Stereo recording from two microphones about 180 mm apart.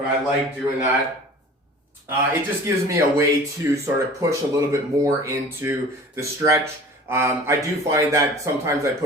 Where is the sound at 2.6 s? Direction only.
15° right (ahead or behind).